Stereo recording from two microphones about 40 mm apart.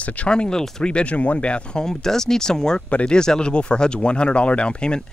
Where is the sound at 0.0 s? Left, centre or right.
Left.